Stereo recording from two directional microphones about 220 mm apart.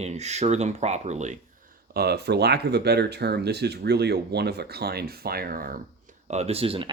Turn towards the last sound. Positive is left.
turn(degrees=-25)  # may be behind; listen again after turning